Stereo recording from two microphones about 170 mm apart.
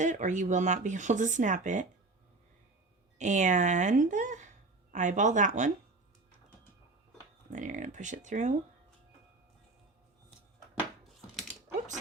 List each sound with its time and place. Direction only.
0.0 s speech: 45° right (ahead or behind)
3.2 s speech: 45° right (ahead or behind)
7.5 s speech: 45° right (ahead or behind)